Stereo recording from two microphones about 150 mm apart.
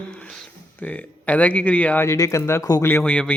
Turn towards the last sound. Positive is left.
turn(degrees=10)  # may be behind; listen again after turning